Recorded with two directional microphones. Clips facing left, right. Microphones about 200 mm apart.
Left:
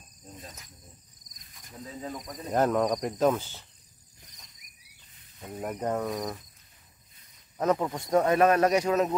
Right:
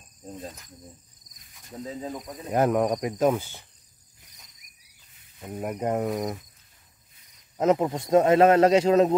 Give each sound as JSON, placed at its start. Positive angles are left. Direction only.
{"t": 2.1, "sound": "speech", "side_deg": -5}
{"t": 5.4, "sound": "speech", "side_deg": -10}
{"t": 7.5, "sound": "speech", "side_deg": -20}